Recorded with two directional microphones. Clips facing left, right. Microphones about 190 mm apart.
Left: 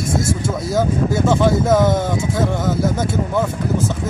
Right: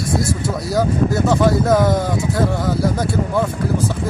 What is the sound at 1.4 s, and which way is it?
Speech, centre (ahead or behind).